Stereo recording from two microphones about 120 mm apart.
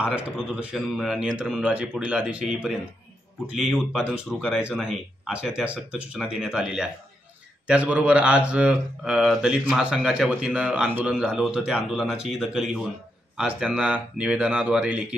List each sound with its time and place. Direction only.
0.0 s speech: 10° right (ahead or behind)